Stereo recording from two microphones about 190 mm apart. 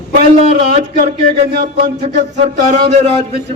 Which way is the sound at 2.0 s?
40° right (ahead or behind).